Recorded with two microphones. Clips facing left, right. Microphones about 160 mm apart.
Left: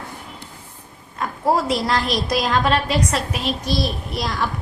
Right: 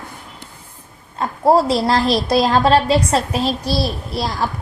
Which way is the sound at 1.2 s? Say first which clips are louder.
Right 6 dB; 30° right (ahead or behind).